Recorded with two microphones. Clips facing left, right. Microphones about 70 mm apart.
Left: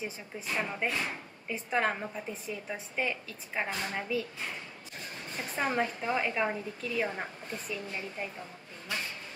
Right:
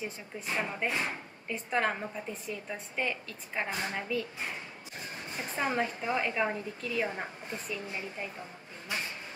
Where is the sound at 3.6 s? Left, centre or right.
Centre.